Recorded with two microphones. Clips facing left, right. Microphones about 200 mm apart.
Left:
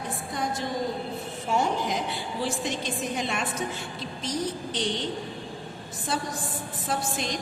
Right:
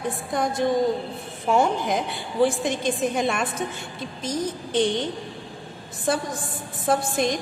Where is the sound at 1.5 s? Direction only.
55° right (ahead or behind).